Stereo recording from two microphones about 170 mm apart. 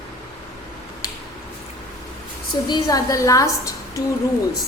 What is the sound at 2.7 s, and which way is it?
A woman's voice, 20° left (ahead or behind).